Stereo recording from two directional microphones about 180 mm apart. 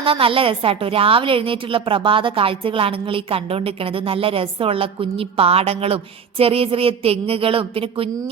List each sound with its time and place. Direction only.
0.0 s a woman's voice: 30° right (ahead or behind)